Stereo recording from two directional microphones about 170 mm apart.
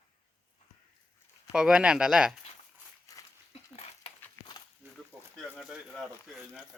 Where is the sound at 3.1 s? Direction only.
20° left (ahead or behind).